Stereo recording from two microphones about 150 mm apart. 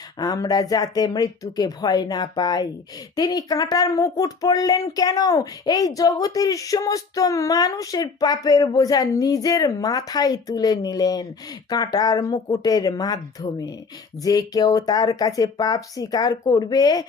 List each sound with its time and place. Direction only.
0.2 s speech: 25° left (ahead or behind)